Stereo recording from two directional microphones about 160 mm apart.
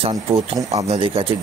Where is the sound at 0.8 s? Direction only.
40° right (ahead or behind).